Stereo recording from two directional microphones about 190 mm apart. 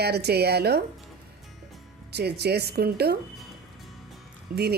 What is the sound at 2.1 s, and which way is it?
A woman's voice, 60° right (ahead or behind).